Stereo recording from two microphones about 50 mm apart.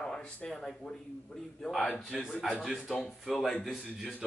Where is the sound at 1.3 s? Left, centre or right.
Left.